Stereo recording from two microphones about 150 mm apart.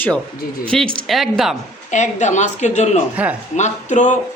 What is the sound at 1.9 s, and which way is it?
Speech, 50° left (ahead or behind).